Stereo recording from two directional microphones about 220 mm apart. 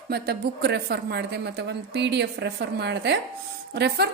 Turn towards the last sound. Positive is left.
turn(degrees=-50)  # may be behind; listen again after turning